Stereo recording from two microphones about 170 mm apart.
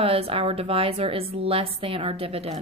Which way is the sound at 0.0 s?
35° right (ahead or behind).